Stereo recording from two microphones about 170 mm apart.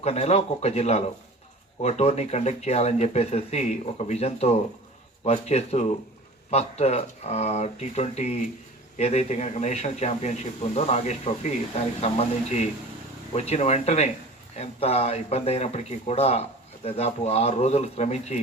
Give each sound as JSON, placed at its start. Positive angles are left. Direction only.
{"t": 0.0, "sound": "speech", "side_deg": 35}